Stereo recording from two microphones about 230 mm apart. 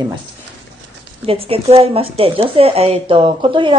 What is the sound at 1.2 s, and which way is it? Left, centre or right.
Speech, right.